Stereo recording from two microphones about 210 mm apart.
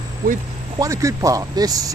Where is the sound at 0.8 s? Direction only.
15° right (ahead or behind).